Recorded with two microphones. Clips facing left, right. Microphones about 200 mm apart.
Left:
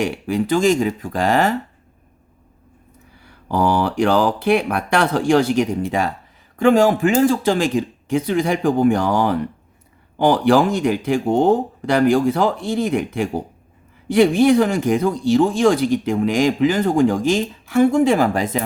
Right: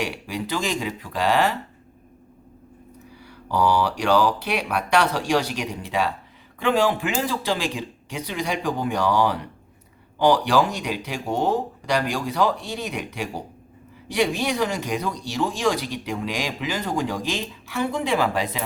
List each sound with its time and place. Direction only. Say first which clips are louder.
0.0 s speech: left 8 dB; 50° left (ahead or behind)
3.2 s speech: left 3 dB; 50° left (ahead or behind)